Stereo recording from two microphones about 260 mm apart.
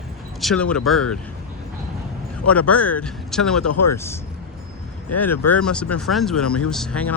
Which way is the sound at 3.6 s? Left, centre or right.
Left.